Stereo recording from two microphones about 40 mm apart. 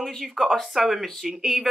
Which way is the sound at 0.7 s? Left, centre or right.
Centre.